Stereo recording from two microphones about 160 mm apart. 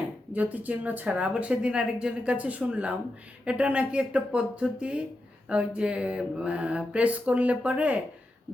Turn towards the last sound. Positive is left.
turn(degrees=-10)  # may be behind; listen again after turning